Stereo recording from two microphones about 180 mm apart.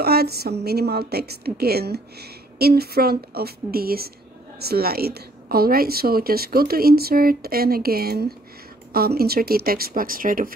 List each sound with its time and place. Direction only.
0.0 s a woman's voice: 60° right (ahead or behind)